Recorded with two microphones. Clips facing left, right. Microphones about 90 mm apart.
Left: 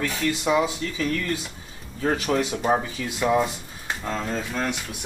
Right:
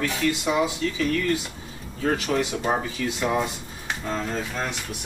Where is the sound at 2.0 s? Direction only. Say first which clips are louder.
Left 1 dB; 20° left (ahead or behind).